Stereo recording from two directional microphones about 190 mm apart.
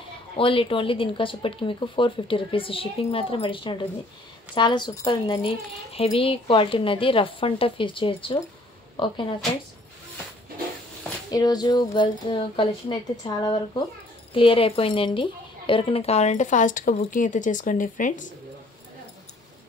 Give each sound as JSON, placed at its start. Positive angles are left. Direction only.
{"t": 0.4, "sound": "speech", "side_deg": 30}
{"t": 11.2, "sound": "speech", "side_deg": 20}